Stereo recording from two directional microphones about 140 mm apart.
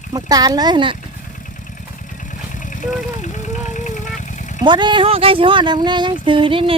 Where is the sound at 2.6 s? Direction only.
65° left (ahead or behind).